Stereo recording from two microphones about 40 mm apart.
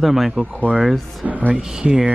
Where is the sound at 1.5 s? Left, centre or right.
Centre.